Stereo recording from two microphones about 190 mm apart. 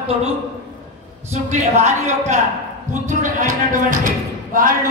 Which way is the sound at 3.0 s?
40° right (ahead or behind).